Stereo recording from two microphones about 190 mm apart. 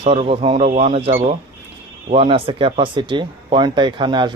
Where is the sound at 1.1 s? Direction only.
40° right (ahead or behind).